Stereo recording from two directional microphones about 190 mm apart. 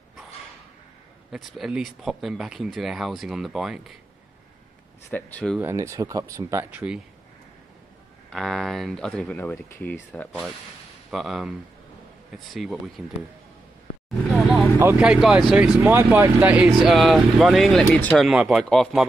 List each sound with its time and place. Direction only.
1.3 s speech: centre (ahead or behind)
5.1 s speech: 5° left (ahead or behind)
5.6 s speech: 15° right (ahead or behind)
8.3 s speech: centre (ahead or behind)
11.1 s speech: centre (ahead or behind)
14.8 s speech: 5° right (ahead or behind)